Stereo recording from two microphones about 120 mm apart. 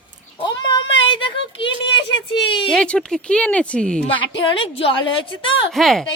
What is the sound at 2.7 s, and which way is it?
Speech, 10° left (ahead or behind).